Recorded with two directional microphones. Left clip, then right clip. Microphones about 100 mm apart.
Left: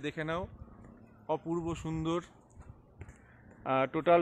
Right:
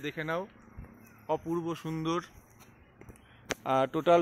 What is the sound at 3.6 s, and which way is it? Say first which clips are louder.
Speech: right 2 dB; 45° right (ahead or behind).